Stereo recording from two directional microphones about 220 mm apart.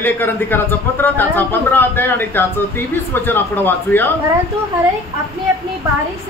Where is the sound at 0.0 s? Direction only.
10° left (ahead or behind).